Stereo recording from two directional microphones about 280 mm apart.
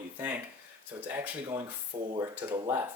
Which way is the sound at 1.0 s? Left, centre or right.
Centre.